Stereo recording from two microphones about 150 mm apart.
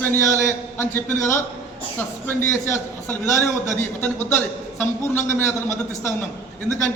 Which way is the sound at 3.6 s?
15° left (ahead or behind).